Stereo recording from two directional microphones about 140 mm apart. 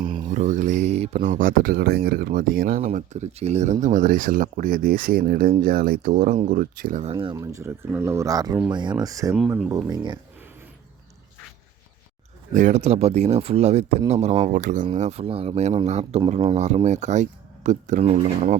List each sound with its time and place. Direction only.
0.0 s mantra: 40° right (ahead or behind)
0.3 s speech: 60° right (ahead or behind); by 2.8 s 90° right
2.8 s speech: 55° right (ahead or behind); by 7.0 s 90° right
7.0 s speech: 35° right (ahead or behind)
7.3 s speech: 20° right (ahead or behind)
12.5 s speech: 60° right (ahead or behind)
14.9 s speech: 55° right (ahead or behind)
18.0 s speech: 45° right (ahead or behind)